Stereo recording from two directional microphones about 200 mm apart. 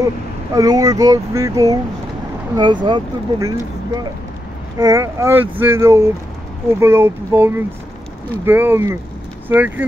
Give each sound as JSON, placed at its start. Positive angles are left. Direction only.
{"t": 0.5, "sound": "speech", "side_deg": -15}
{"t": 4.7, "sound": "speech", "side_deg": -15}